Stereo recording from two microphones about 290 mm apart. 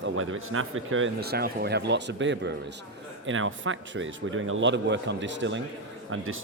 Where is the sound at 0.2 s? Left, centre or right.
Right.